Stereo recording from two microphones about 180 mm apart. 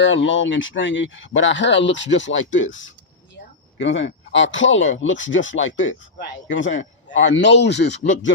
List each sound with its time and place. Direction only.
0.0 s speech: 90° left